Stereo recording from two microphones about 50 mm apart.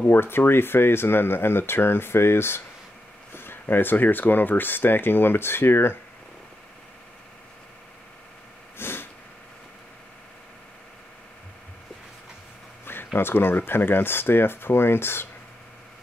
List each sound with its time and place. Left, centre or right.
0.0 s speech: left
8.7 s a sound: left
12.8 s speech: left